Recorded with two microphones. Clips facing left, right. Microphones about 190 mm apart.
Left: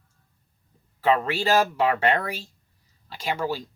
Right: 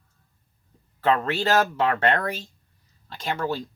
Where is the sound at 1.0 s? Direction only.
10° left (ahead or behind).